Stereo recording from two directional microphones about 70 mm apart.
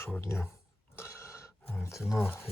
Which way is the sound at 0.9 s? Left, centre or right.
Left.